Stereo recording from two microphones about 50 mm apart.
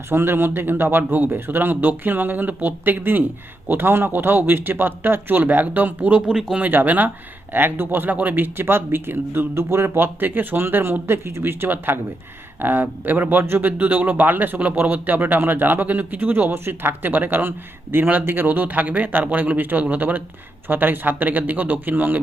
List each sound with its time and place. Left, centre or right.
0.1 s a man's voice: right